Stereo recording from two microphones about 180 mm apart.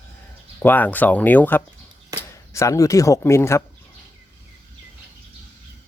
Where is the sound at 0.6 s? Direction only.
10° left (ahead or behind).